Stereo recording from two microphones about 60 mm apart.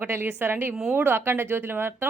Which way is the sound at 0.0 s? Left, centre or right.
Right.